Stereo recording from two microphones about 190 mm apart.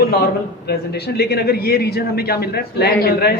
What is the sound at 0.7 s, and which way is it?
A man's voice, 55° left (ahead or behind).